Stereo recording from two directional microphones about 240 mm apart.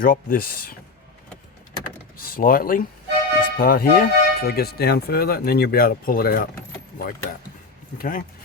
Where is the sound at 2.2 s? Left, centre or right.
Left.